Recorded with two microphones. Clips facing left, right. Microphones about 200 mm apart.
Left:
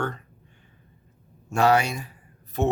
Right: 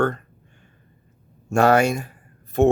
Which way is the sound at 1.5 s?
50° right (ahead or behind).